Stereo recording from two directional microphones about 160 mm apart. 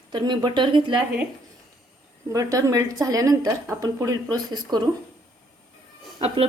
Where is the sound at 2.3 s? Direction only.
20° right (ahead or behind).